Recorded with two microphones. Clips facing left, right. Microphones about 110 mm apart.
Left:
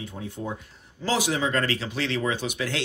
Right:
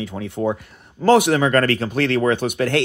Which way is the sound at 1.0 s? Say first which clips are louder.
Right 11 dB; 60° right (ahead or behind).